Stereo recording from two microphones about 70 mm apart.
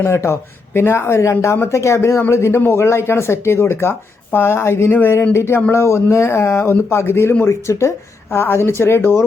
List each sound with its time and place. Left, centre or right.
0.0 s speech: left
4.9 s speech: left